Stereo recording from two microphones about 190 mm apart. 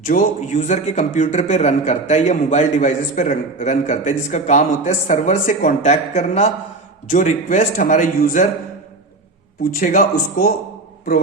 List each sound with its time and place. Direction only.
0.0 s a man's voice: 45° left (ahead or behind)
9.7 s speech: 45° left (ahead or behind)